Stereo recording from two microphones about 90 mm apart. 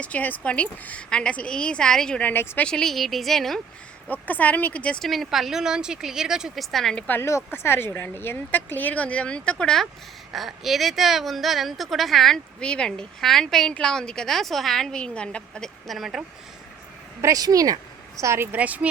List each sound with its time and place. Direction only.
0.0 s a woman's voice: 15° left (ahead or behind)
2.3 s speech: 25° left (ahead or behind)
2.6 s speech: 5° left (ahead or behind)
4.1 s a woman's voice: 20° left (ahead or behind)
5.0 s speech: centre (ahead or behind)
7.1 s speech: 30° left (ahead or behind); by 16.2 s centre (ahead or behind)
17.2 s speech: 35° right (ahead or behind)
18.2 s a woman's voice: 30° right (ahead or behind)
18.5 s speech: 15° right (ahead or behind)